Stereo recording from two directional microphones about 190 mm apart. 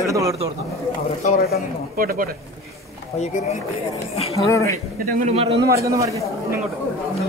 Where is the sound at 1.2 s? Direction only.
50° left (ahead or behind).